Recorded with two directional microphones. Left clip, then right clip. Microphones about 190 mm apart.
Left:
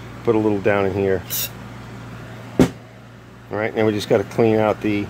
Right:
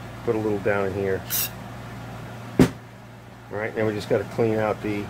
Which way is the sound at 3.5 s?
40° left (ahead or behind).